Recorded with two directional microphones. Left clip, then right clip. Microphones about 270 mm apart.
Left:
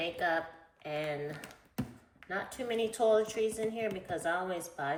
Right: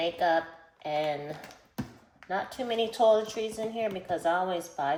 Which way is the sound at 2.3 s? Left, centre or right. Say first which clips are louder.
Right 4 dB; right.